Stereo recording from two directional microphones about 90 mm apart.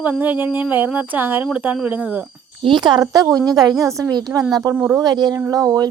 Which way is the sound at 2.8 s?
55° right (ahead or behind).